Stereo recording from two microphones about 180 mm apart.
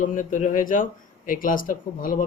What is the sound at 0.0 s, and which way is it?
Speech, 45° left (ahead or behind).